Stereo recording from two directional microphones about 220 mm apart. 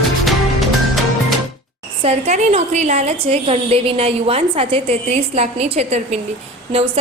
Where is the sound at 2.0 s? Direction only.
30° right (ahead or behind).